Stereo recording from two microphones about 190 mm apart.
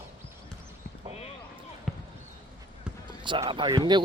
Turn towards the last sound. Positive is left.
turn(degrees=-25)  # may be behind; listen again after turning